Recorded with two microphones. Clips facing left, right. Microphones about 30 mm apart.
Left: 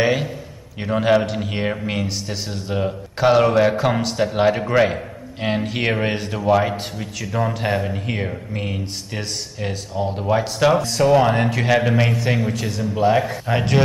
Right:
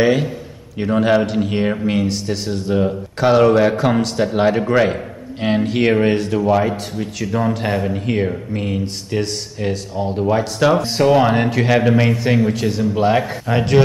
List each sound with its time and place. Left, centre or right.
0.0 s speech: centre
10.8 s speech: right
11.1 s a man's voice: centre
12.9 s speech: right
13.5 s speech: centre